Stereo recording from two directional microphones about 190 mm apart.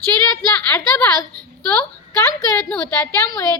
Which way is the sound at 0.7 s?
15° left (ahead or behind).